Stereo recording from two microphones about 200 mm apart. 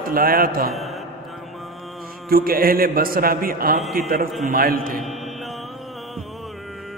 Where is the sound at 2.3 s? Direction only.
45° right (ahead or behind).